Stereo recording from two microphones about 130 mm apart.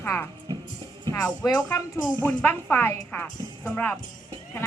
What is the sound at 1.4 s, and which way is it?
A woman's voice, 25° left (ahead or behind).